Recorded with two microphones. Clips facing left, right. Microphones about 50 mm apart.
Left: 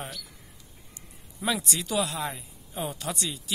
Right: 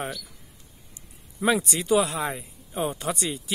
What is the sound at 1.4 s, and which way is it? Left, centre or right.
Speech, right.